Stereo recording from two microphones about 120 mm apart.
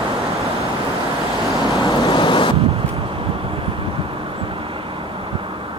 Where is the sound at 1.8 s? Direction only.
35° left (ahead or behind).